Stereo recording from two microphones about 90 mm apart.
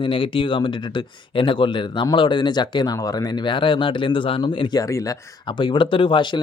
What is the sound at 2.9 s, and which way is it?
Speech, 40° left (ahead or behind).